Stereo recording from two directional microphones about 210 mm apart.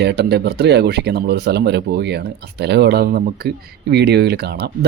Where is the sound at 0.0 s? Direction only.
55° right (ahead or behind).